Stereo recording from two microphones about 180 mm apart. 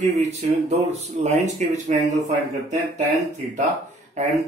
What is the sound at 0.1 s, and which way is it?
Speech, 40° right (ahead or behind).